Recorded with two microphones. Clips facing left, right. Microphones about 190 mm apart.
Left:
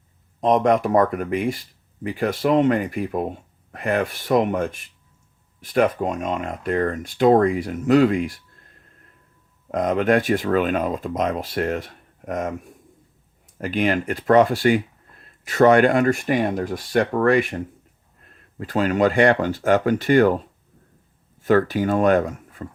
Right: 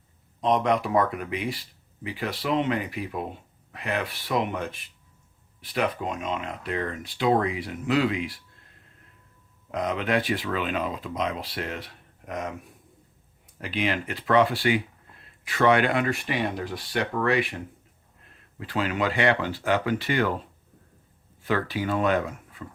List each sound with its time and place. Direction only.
0.4 s speech: 45° left (ahead or behind)
9.7 s speech: 45° left (ahead or behind)
13.6 s speech: 45° left (ahead or behind)
21.4 s speech: 45° left (ahead or behind)